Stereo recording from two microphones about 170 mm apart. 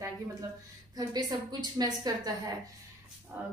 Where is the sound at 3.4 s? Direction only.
10° right (ahead or behind).